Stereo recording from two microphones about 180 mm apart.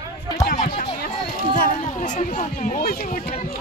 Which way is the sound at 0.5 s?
45° left (ahead or behind).